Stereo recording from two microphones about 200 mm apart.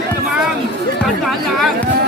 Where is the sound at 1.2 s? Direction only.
Centre (ahead or behind).